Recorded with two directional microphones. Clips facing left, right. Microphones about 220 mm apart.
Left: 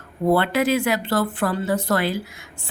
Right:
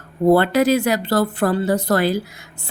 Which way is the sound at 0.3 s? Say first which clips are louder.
Right 5 dB; 40° right (ahead or behind).